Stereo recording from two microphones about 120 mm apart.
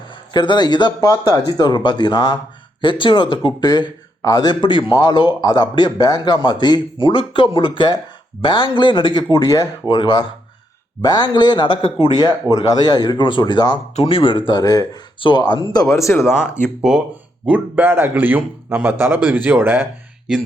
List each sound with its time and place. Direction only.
0.1 s speech: 40° left (ahead or behind)
12.1 s speech: 35° left (ahead or behind)
13.9 s speech: 50° left (ahead or behind)
15.7 s speech: 30° left (ahead or behind)
16.6 s a man's voice: 5° right (ahead or behind)